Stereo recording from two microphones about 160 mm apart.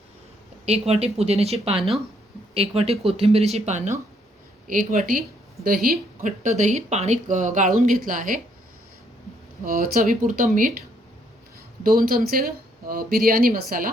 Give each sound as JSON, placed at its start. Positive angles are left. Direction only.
{"t": 0.6, "sound": "speech", "side_deg": -40}
{"t": 9.6, "sound": "speech", "side_deg": -60}
{"t": 11.9, "sound": "speech", "side_deg": -65}